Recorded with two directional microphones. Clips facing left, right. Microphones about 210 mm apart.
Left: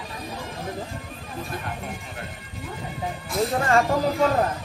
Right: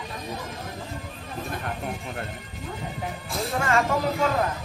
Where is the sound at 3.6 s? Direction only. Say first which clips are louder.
Left 1 dB; 35° left (ahead or behind).